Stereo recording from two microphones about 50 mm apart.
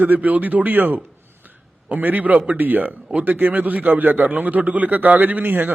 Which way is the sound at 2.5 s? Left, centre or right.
Right.